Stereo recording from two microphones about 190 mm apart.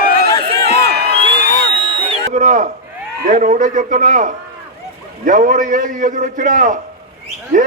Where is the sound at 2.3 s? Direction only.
40° right (ahead or behind).